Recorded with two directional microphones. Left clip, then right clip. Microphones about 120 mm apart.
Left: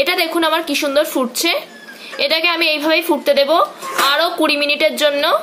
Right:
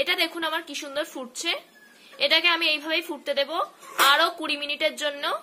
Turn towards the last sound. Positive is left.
turn(degrees=10)  # may be behind; listen again after turning